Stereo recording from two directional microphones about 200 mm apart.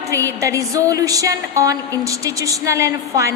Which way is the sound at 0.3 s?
15° right (ahead or behind).